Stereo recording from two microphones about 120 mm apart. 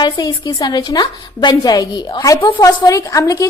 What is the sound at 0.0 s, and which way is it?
A woman's voice, 40° left (ahead or behind).